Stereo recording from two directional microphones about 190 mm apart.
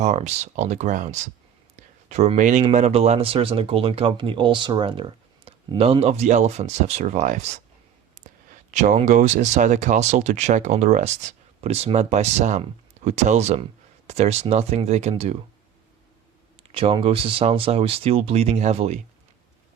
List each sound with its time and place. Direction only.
0.0 s speech: 35° right (ahead or behind)
8.7 s speech: 40° right (ahead or behind)
16.7 s speech: 30° right (ahead or behind)